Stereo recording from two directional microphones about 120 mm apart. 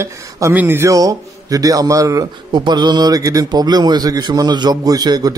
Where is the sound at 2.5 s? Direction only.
40° right (ahead or behind).